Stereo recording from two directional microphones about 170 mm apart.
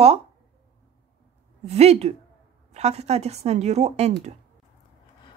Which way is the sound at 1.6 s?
40° right (ahead or behind).